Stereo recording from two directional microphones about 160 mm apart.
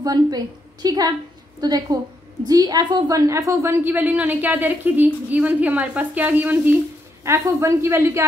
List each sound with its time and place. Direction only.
0.0 s a woman's voice: 25° right (ahead or behind)